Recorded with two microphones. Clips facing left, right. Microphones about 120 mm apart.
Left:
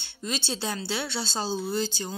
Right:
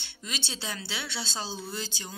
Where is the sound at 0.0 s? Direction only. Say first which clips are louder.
Left 6 dB; 35° left (ahead or behind).